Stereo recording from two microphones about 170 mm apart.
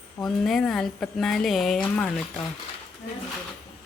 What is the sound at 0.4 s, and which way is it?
A woman's voice, centre (ahead or behind).